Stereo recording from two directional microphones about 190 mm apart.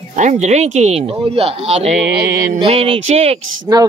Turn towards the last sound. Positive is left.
turn(degrees=-20)  # may be behind; listen again after turning